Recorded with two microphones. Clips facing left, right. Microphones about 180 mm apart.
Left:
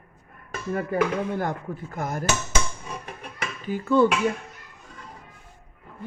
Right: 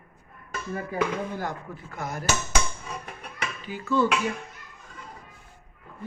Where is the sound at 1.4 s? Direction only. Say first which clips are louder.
Left 5 dB; 50° left (ahead or behind).